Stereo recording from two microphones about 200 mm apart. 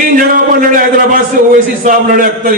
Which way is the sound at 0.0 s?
45° right (ahead or behind).